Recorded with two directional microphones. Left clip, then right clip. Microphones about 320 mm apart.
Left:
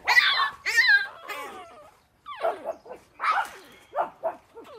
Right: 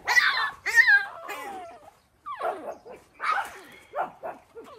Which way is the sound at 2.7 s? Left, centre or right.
Left.